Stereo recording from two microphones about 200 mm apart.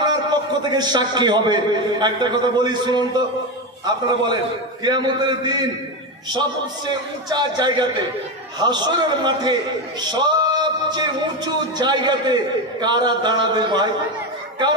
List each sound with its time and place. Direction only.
0.0 s a man's voice: 20° right (ahead or behind)
4.8 s a man's voice: 20° right (ahead or behind)
7.2 s a man's voice: 20° right (ahead or behind)